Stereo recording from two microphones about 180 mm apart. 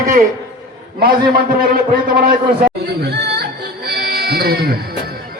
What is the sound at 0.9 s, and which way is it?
Speech, 55° right (ahead or behind).